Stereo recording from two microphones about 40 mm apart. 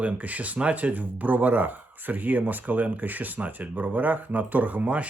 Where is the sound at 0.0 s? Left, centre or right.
Right.